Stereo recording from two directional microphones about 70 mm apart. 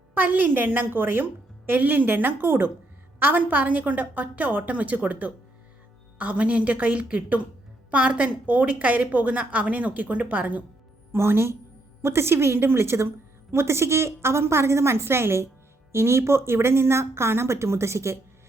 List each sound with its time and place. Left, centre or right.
0.1 s a woman's voice: right
11.1 s a woman's voice: right